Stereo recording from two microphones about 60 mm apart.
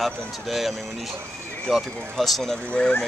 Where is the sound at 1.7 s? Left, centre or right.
Centre.